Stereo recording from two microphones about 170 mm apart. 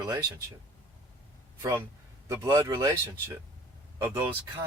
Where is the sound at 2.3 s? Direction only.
20° right (ahead or behind).